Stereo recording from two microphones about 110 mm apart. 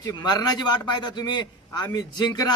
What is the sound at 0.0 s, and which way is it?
A man's voice, 40° left (ahead or behind).